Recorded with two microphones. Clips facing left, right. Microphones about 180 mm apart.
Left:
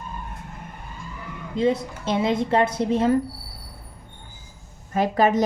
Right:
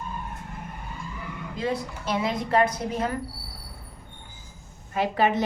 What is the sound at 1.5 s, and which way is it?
A woman's voice, 25° left (ahead or behind).